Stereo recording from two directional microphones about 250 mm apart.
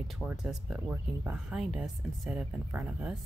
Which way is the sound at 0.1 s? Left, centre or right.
Centre.